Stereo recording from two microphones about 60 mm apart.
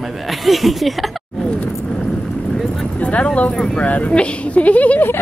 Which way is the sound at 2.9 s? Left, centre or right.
Left.